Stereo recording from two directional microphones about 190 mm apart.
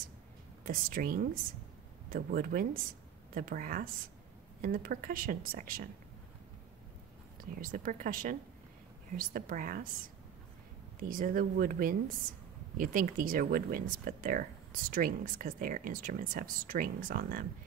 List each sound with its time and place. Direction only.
0.7 s speech: 50° right (ahead or behind)
7.5 s speech: 45° right (ahead or behind)
11.0 s speech: 45° right (ahead or behind)